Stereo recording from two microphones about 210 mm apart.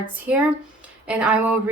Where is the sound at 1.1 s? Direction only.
5° right (ahead or behind).